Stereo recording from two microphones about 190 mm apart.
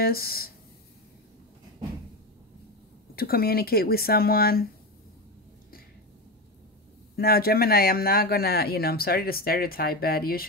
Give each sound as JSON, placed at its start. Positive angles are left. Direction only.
{"t": 0.0, "sound": "speech", "side_deg": 50}
{"t": 3.2, "sound": "speech", "side_deg": 55}
{"t": 7.2, "sound": "speech", "side_deg": 55}